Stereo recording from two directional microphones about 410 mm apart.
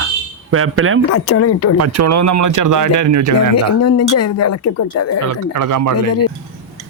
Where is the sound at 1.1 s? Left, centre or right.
Left.